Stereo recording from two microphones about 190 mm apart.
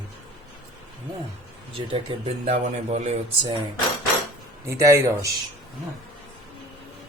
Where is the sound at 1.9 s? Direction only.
35° right (ahead or behind).